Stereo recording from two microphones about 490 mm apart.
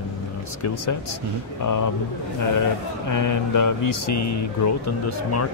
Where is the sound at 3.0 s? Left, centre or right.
Left.